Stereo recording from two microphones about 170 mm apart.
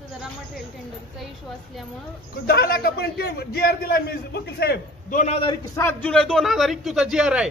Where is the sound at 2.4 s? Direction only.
65° left (ahead or behind).